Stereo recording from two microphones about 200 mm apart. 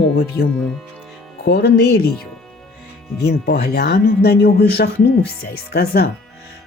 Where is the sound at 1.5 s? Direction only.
55° left (ahead or behind).